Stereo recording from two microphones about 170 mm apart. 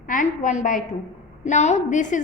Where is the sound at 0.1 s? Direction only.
45° left (ahead or behind).